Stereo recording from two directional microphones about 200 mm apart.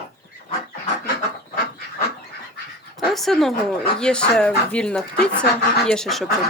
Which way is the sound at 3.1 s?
Centre (ahead or behind).